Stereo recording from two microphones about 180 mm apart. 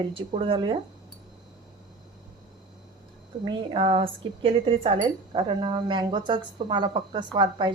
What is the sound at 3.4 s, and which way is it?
Speech, 30° right (ahead or behind).